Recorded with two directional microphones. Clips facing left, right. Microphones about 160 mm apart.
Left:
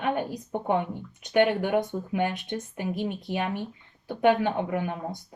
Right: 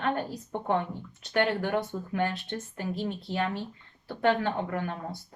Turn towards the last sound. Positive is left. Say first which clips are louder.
# left 3 dB
turn(degrees=15)  # may be behind; listen again after turning